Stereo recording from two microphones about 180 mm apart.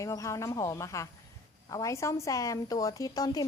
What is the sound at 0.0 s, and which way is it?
A woman's voice, 15° left (ahead or behind).